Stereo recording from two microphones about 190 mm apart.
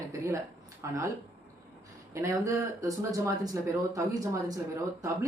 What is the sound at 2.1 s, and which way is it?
Speech, 15° right (ahead or behind).